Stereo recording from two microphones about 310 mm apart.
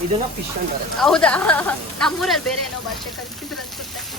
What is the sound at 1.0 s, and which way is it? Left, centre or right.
Speech, centre.